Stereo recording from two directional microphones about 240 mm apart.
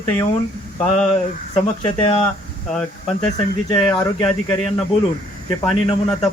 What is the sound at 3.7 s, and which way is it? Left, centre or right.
Speech, centre.